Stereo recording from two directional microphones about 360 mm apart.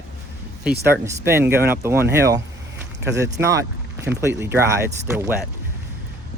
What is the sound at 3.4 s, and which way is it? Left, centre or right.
Speech, centre.